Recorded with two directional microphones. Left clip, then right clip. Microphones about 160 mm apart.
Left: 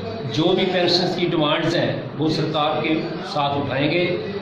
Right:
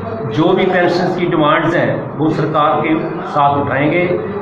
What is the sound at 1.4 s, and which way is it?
Speech, 30° left (ahead or behind).